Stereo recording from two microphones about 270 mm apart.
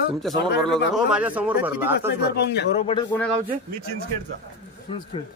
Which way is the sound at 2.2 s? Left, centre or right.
Left.